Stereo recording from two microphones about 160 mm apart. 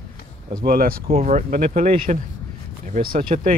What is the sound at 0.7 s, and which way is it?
Speech, 65° right (ahead or behind).